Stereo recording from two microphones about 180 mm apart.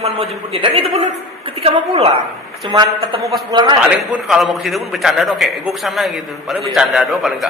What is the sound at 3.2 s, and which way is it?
A man's voice, centre (ahead or behind).